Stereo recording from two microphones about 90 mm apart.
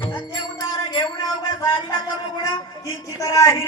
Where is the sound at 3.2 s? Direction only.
40° left (ahead or behind).